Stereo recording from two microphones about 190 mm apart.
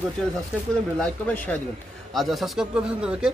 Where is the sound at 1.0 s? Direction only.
10° left (ahead or behind).